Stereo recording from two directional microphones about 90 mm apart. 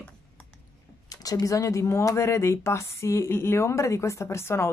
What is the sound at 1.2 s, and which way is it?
Speech, 40° left (ahead or behind).